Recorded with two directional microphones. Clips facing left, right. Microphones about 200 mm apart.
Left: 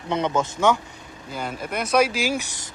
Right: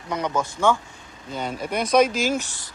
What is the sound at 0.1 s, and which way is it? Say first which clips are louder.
Speech: left 2 dB; 25° left (ahead or behind).